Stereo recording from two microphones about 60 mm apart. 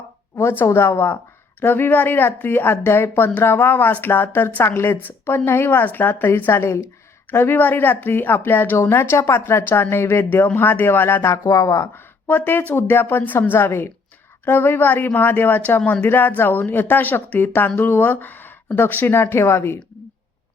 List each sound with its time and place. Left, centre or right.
0.6 s speech: left
7.3 s speech: left
10.2 s speech: left
11.3 s speech: left
12.3 s speech: left